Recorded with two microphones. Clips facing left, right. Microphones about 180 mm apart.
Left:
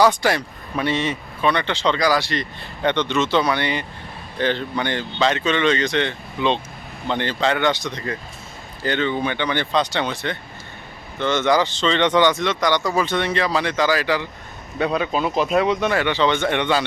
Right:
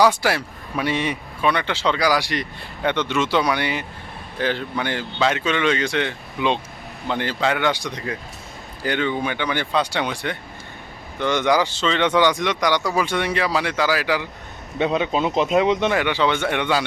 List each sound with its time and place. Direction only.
0.0 s speech: 5° right (ahead or behind)
14.8 s speech: 20° right (ahead or behind)